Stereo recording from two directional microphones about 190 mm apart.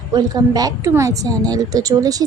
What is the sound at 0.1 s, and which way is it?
A woman's voice, 20° right (ahead or behind).